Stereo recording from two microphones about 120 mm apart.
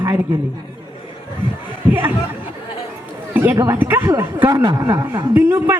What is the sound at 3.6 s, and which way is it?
Speech, 20° right (ahead or behind).